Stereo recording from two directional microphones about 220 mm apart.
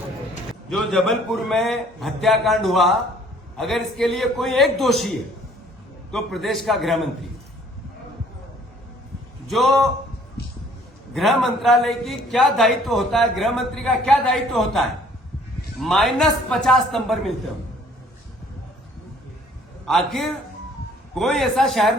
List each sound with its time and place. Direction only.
0.7 s a man's voice: centre (ahead or behind)
9.5 s a man's voice: centre (ahead or behind)
11.1 s a man's voice: centre (ahead or behind)
19.8 s a man's voice: centre (ahead or behind)